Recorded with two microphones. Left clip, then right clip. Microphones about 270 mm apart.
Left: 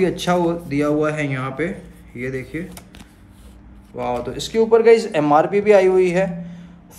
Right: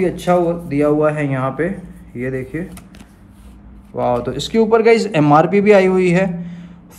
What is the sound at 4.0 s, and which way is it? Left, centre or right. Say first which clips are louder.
A man's voice: right 6 dB; centre.